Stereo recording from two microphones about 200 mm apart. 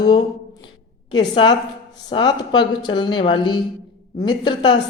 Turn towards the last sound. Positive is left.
turn(degrees=25)  # may be behind; listen again after turning